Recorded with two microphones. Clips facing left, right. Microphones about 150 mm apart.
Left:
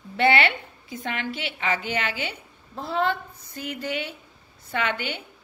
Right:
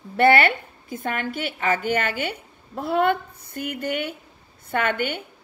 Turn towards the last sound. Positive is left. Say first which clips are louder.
# right 4 dB
turn(degrees=-50)  # may be behind; listen again after turning